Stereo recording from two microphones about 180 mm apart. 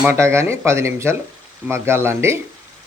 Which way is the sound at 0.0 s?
15° right (ahead or behind).